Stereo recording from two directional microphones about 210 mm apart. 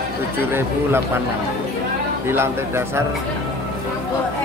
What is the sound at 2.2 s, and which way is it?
Speech, 10° right (ahead or behind).